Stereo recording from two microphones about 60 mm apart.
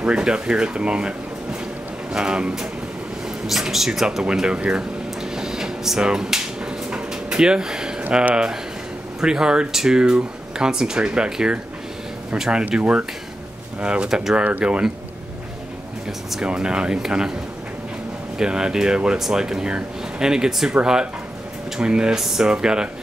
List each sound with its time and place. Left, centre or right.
0.0 s speech: centre
2.1 s speech: centre
4.2 s air conditioning: centre
8.1 s speech: centre
14.3 s speech: right
16.4 s speech: centre
18.4 s speech: centre